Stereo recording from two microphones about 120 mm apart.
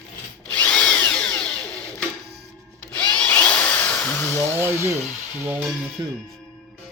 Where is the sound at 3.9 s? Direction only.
15° left (ahead or behind).